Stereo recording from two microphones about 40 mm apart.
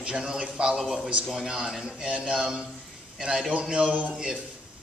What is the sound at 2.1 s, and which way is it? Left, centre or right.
Speech, right.